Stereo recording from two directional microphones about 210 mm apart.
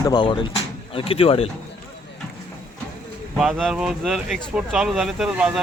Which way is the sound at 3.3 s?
5° right (ahead or behind).